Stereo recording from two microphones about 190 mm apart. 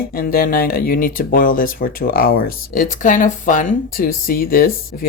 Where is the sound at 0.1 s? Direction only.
50° left (ahead or behind).